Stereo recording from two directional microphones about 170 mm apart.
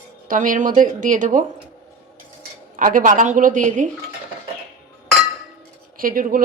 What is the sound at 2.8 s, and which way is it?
Speech, 50° right (ahead or behind).